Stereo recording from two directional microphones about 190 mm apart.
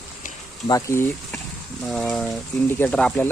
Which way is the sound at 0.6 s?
15° left (ahead or behind).